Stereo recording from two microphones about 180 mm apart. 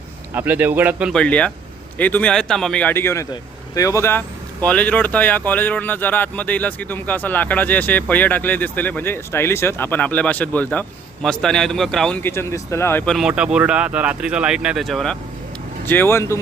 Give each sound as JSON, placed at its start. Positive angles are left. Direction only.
{"t": 0.3, "sound": "speech", "side_deg": -10}
{"t": 1.1, "sound": "speech", "side_deg": 5}
{"t": 13.1, "sound": "speech", "side_deg": -5}